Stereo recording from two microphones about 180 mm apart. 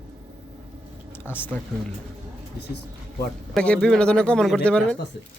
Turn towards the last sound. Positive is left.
turn(degrees=5)  # may be behind; listen again after turning